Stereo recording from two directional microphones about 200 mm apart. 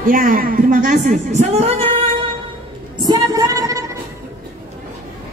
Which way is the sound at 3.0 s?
20° right (ahead or behind).